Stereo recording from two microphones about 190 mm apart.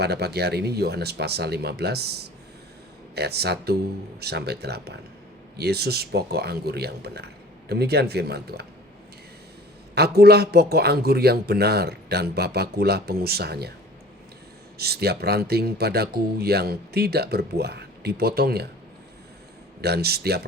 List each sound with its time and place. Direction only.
0.0 s speech: 60° right (ahead or behind)
9.9 s speech: 60° right (ahead or behind)
14.8 s speech: 55° right (ahead or behind)
19.8 s speech: 55° right (ahead or behind)